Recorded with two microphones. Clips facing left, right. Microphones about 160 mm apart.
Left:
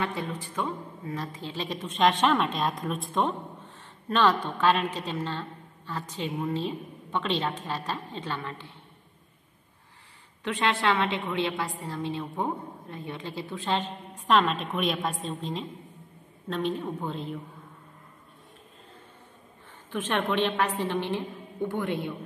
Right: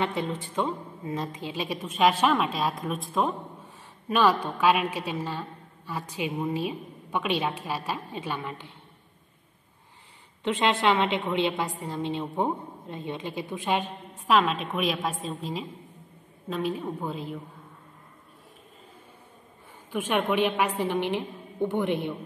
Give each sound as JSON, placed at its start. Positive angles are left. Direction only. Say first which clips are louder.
{"t": 0.0, "sound": "a woman's voice", "louder": "right 3 dB", "side_deg": -20}
{"t": 10.4, "sound": "a woman's voice", "louder": "right 3 dB", "side_deg": -20}
{"t": 19.9, "sound": "a woman's voice", "louder": "right 2 dB", "side_deg": -10}